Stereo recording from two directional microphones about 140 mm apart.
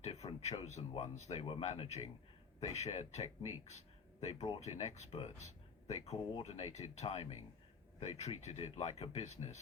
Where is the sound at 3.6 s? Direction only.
50° left (ahead or behind).